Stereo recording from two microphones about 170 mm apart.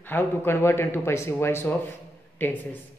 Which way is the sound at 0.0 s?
10° left (ahead or behind).